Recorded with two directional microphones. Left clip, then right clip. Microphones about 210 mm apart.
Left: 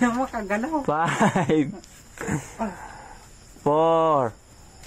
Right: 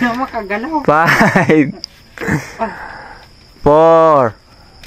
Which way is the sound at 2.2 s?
25° right (ahead or behind).